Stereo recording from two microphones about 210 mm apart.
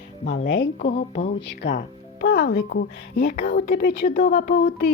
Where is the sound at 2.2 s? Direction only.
45° left (ahead or behind).